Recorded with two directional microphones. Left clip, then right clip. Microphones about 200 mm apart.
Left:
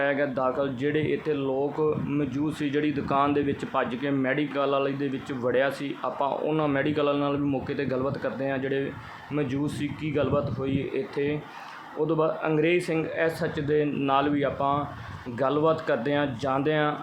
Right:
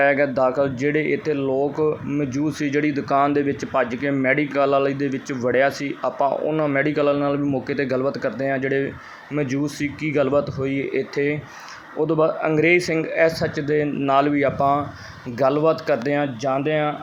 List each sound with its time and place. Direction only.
0.0 s speech: 20° right (ahead or behind)
12.0 s speech: 20° right (ahead or behind)